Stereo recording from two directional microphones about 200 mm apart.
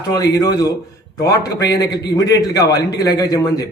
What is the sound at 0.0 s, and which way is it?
A man's voice, 20° left (ahead or behind).